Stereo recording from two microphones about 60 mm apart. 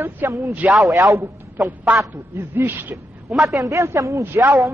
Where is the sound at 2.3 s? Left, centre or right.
Right.